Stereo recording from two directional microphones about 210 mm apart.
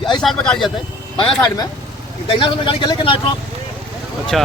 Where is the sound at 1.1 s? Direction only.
25° left (ahead or behind).